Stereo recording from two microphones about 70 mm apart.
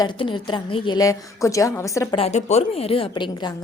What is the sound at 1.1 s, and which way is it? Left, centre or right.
Speech, left.